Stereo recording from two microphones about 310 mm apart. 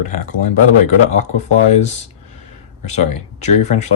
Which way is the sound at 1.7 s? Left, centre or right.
Left.